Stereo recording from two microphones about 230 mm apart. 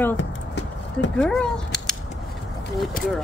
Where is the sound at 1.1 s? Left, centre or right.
Centre.